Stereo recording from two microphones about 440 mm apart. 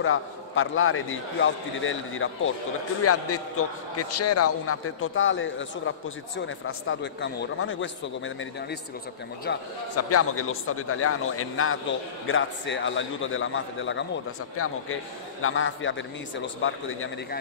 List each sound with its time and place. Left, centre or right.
0.0 s a man's voice: left